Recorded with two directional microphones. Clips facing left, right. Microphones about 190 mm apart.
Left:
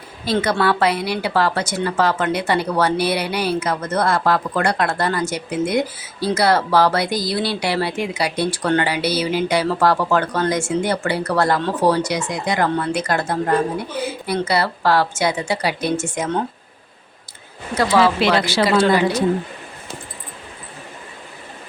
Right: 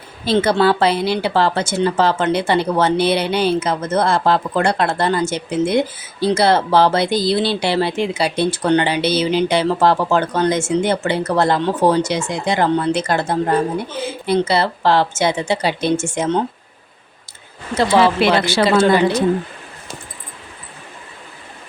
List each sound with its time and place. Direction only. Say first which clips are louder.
0.3 s speech: right 4 dB; 25° right (ahead or behind)
17.7 s speech: right 2 dB; 25° right (ahead or behind)